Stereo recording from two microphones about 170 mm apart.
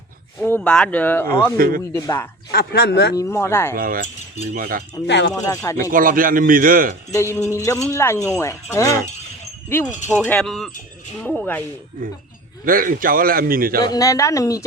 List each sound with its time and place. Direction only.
0.3 s speech: 10° left (ahead or behind)
1.5 s a man's voice: 60° right (ahead or behind)
1.9 s speech: 15° left (ahead or behind)
2.5 s speech: 70° left (ahead or behind)
3.2 s speech: 15° left (ahead or behind)
3.8 s a man's voice: 55° right (ahead or behind)
5.0 s speech: 90° left
5.4 s speech: 20° left (ahead or behind)
5.9 s a man's voice: 55° right (ahead or behind)
7.1 s speech: 15° left (ahead or behind)
10.1 s pulleys: 10° left (ahead or behind)
11.2 s speech: 5° left (ahead or behind)
12.6 s a man's voice: 55° right (ahead or behind)
13.8 s speech: 20° left (ahead or behind)